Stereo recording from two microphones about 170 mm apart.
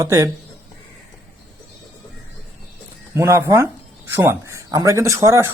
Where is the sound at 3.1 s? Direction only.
15° right (ahead or behind).